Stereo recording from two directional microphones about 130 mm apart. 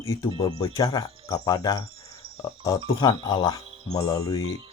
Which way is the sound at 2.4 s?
25° left (ahead or behind).